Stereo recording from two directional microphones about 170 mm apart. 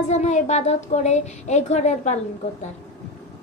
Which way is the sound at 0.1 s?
45° left (ahead or behind).